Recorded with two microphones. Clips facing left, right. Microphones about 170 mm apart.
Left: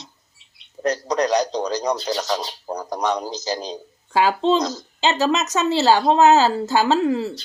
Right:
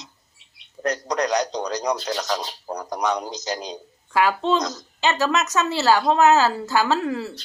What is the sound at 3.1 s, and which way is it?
Speech, 30° left (ahead or behind).